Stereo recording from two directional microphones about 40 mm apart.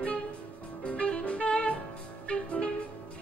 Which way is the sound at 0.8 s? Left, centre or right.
Left.